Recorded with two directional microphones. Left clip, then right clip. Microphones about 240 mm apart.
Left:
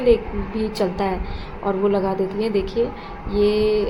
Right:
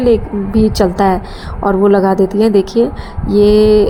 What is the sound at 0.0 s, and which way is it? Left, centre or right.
A woman's voice, right.